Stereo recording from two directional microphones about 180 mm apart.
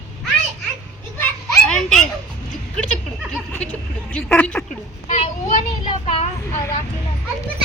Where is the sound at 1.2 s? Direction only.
5° left (ahead or behind).